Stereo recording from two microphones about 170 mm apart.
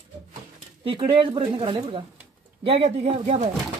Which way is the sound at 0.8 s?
30° right (ahead or behind).